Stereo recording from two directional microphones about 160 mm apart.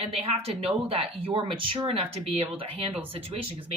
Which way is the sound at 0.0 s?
40° right (ahead or behind).